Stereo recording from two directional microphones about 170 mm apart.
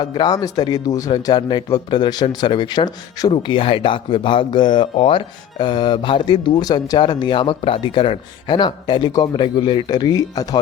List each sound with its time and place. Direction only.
0.0 s a man's voice: 25° left (ahead or behind)